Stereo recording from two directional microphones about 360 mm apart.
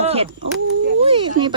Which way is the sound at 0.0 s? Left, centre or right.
Centre.